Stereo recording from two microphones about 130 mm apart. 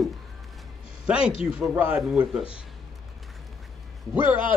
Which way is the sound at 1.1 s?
10° right (ahead or behind).